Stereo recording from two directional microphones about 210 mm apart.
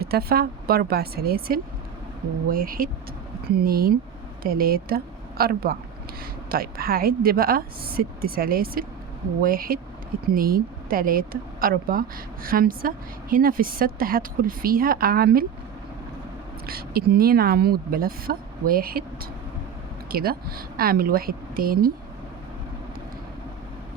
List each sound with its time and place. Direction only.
0.0 s a woman's voice: 50° right (ahead or behind)
16.6 s speech: 45° right (ahead or behind)